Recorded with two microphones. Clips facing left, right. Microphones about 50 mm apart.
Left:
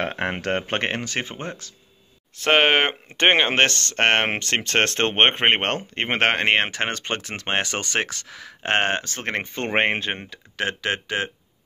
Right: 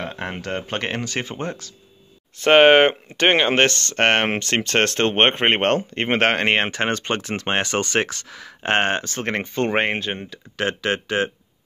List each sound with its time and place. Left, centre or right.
0.0 s speech: left
0.8 s speech: left
2.4 s speech: centre
3.1 s speech: centre
3.4 s speech: centre
9.4 s speech: centre
10.6 s speech: centre